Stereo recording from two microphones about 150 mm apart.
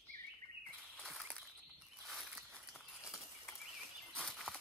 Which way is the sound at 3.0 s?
20° left (ahead or behind).